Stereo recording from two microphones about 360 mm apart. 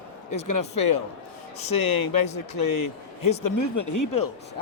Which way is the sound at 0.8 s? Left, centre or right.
Left.